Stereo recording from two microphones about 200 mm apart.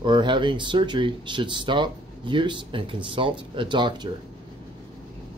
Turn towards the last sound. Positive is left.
turn(degrees=-20)  # may be behind; listen again after turning